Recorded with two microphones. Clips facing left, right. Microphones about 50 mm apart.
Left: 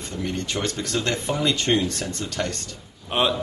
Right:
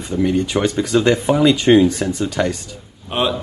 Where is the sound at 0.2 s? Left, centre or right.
Centre.